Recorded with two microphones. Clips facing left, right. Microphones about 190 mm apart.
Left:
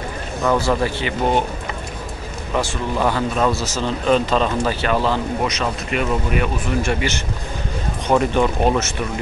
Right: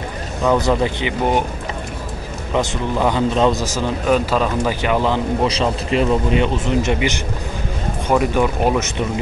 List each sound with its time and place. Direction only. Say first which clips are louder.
0.4 s speech: right 2 dB; 15° right (ahead or behind)
2.5 s speech: right 2 dB; 20° right (ahead or behind)
5.5 s speech: right 4 dB; 30° right (ahead or behind)
8.1 s speech: even; 10° right (ahead or behind)